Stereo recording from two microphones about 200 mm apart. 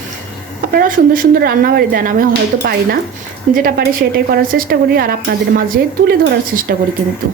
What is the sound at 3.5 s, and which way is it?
A woman's voice, 45° right (ahead or behind).